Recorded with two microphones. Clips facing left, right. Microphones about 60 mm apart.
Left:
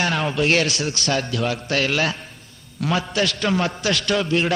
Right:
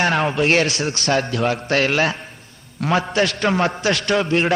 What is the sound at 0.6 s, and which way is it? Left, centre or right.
Speech, right.